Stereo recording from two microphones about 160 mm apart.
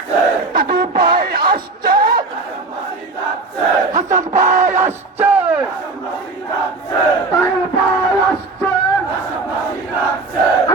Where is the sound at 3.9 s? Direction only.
50° right (ahead or behind).